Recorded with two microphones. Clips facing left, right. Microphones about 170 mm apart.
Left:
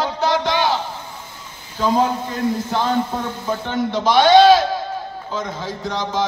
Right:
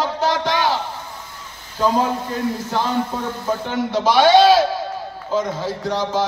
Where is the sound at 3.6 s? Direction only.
10° right (ahead or behind).